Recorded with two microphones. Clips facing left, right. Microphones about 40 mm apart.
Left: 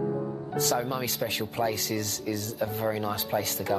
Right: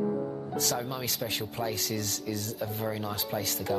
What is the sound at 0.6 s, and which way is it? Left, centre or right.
Speech, centre.